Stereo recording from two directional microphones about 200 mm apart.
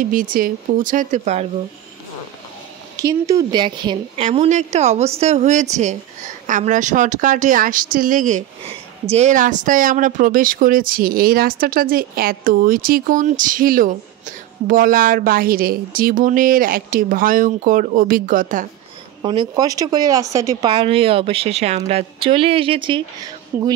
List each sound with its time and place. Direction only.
0.0 s a woman's voice: 45° right (ahead or behind)
3.0 s speech: 15° right (ahead or behind)
4.2 s a woman's voice: 35° right (ahead or behind)
19.2 s speech: 25° right (ahead or behind)
20.7 s speech: 30° right (ahead or behind)
23.5 s speech: 10° right (ahead or behind)